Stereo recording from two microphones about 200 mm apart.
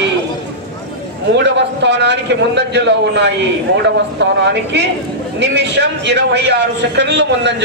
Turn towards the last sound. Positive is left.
turn(degrees=-60)  # may be behind; listen again after turning